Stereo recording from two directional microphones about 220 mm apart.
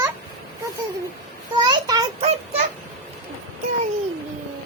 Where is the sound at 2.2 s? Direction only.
30° right (ahead or behind).